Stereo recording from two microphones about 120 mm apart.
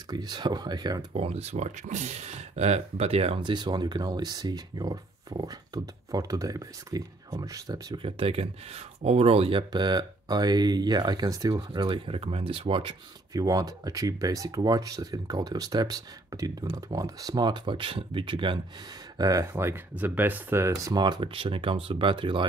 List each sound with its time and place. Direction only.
0.1 s speech: 35° right (ahead or behind)
1.1 s speech: 55° right (ahead or behind)
3.3 s speech: 40° right (ahead or behind)
8.0 s speech: 50° right (ahead or behind)
9.6 s speech: 35° right (ahead or behind)
13.3 s speech: 30° right (ahead or behind)
19.1 s speech: 30° right (ahead or behind)
21.0 s speech: 40° right (ahead or behind)